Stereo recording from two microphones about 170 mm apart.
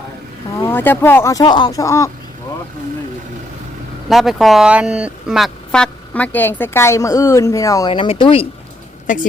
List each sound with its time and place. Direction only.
0.6 s speech: 10° left (ahead or behind)
4.1 s speech: centre (ahead or behind); by 8.4 s 35° left (ahead or behind)